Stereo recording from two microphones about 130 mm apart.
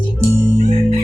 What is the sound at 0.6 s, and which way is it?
Music, 60° right (ahead or behind).